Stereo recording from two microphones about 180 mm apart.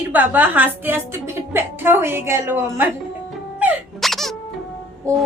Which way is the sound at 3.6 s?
5° right (ahead or behind).